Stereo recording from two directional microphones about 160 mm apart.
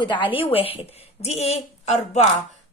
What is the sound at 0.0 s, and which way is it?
A woman's voice, 30° left (ahead or behind).